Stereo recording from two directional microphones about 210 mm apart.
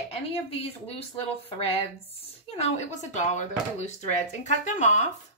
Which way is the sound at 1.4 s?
30° left (ahead or behind).